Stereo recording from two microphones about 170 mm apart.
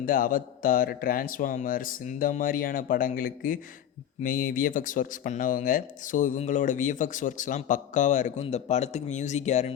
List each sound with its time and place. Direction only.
0.0 s speech: 55° left (ahead or behind)